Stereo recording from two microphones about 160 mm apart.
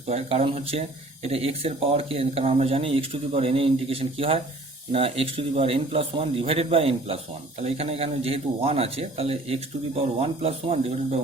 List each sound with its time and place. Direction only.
0.1 s speech: 40° right (ahead or behind)